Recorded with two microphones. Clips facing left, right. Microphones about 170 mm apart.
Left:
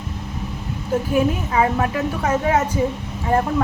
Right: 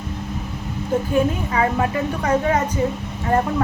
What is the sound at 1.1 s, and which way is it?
A woman's voice, 5° left (ahead or behind).